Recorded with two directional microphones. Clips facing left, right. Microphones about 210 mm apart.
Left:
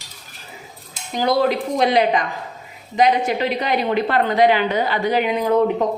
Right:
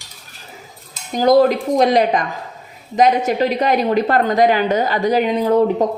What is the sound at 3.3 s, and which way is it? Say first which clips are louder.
A woman's voice: right 4 dB; 45° right (ahead or behind).